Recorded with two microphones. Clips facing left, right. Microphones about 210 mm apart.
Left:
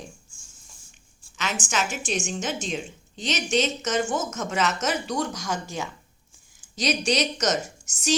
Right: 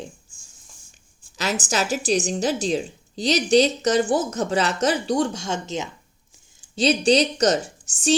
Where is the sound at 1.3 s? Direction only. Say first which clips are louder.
Right 4 dB; 35° right (ahead or behind).